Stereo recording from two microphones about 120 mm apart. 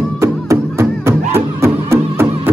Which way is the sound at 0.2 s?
25° right (ahead or behind).